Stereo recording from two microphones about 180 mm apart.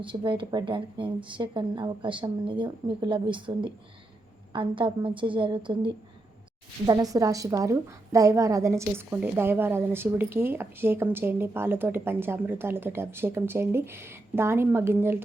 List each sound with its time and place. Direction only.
0.0 s a woman's voice: 25° right (ahead or behind)